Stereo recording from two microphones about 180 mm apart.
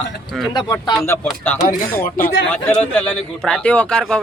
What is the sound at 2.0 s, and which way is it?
A man's voice, 15° left (ahead or behind).